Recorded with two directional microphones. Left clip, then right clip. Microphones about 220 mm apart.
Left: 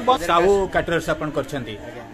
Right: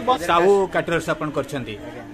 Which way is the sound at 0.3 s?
Centre (ahead or behind).